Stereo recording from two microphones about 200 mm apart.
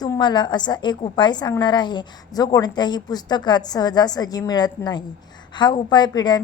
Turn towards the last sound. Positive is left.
turn(degrees=20)  # may be behind; listen again after turning